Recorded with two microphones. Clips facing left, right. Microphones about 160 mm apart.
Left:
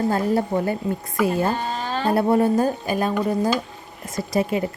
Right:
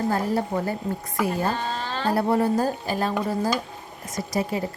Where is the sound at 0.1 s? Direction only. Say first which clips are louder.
Left 3 dB; 25° left (ahead or behind).